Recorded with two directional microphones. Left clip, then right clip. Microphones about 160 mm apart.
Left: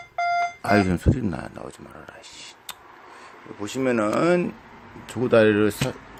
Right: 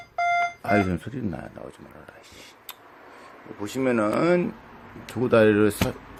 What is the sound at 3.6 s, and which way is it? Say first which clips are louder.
Speech: left 1 dB; 10° left (ahead or behind).